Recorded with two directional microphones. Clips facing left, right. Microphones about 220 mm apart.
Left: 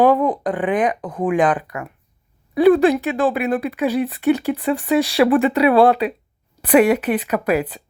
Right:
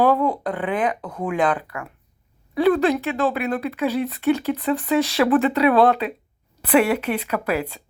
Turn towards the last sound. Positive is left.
turn(degrees=15)  # may be behind; listen again after turning